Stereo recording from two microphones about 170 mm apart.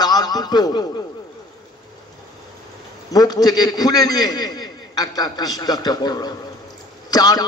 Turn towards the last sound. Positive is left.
turn(degrees=25)  # may be behind; listen again after turning